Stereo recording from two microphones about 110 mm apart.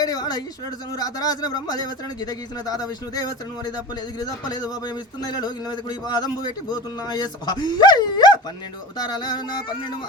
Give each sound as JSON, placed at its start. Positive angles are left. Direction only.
{"t": 0.0, "sound": "a man's voice", "side_deg": 35}